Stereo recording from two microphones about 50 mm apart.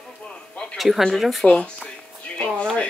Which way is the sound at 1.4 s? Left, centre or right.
Centre.